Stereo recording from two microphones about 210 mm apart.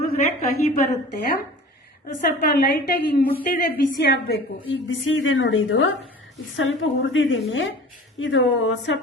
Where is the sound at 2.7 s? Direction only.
50° left (ahead or behind).